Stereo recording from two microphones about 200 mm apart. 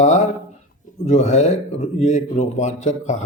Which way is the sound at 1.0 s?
35° left (ahead or behind).